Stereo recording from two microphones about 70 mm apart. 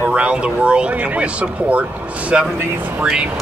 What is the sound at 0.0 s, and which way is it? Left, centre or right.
Speech, centre.